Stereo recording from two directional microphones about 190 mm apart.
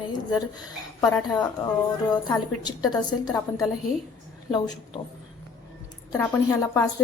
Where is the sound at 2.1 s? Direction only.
20° left (ahead or behind).